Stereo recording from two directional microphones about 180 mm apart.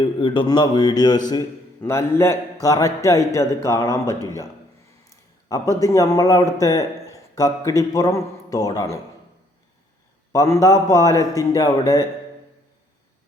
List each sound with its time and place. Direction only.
0.0 s a man's voice: 25° left (ahead or behind)
10.3 s a man's voice: 15° left (ahead or behind)